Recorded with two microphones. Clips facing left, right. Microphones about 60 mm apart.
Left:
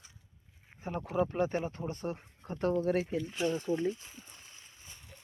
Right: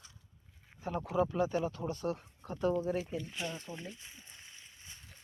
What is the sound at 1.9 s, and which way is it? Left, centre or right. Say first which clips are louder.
Speech: right 1 dB; left.